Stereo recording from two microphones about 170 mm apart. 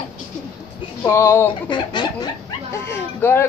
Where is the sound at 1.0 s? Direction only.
15° left (ahead or behind).